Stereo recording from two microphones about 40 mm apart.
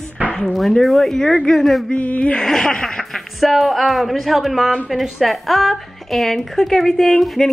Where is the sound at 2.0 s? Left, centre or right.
Left.